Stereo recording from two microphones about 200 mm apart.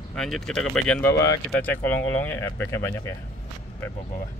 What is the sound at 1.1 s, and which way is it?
Speech, 15° left (ahead or behind).